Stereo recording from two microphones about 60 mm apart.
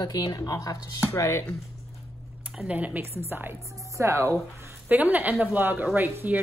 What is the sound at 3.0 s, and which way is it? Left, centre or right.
Speech, right.